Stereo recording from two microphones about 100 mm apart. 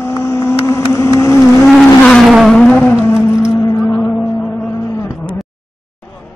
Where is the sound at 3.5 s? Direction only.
30° left (ahead or behind).